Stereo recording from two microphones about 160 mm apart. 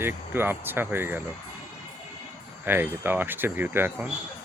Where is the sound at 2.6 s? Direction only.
10° right (ahead or behind).